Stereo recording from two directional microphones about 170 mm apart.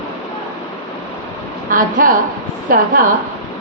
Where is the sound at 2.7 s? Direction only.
55° right (ahead or behind).